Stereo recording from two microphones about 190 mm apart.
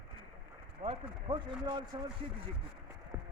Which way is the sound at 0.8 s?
30° right (ahead or behind).